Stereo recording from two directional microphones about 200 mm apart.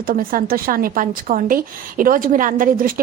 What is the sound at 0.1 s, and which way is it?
A woman's voice, 45° right (ahead or behind).